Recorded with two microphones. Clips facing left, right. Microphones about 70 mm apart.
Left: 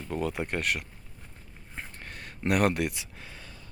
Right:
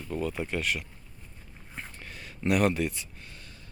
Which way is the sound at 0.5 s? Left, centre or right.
Left.